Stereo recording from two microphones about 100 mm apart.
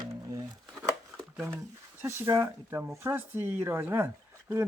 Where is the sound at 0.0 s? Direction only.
35° right (ahead or behind).